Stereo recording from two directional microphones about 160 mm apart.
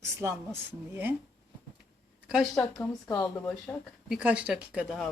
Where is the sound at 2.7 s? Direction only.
20° left (ahead or behind).